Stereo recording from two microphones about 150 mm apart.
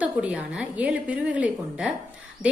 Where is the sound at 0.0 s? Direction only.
10° right (ahead or behind).